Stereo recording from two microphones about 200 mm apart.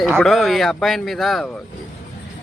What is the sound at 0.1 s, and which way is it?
Speech, centre (ahead or behind).